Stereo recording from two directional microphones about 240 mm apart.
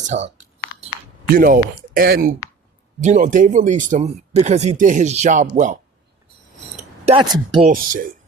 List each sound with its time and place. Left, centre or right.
0.0 s speech: right
1.4 s speech: right
7.0 s speech: right
7.7 s speech: right